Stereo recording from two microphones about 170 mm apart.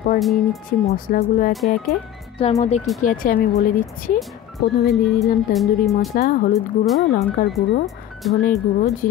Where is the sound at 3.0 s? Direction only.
55° left (ahead or behind).